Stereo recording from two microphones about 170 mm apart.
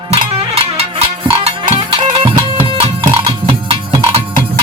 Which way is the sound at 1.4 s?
35° right (ahead or behind).